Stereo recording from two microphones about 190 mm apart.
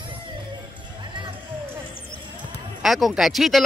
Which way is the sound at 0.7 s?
25° right (ahead or behind).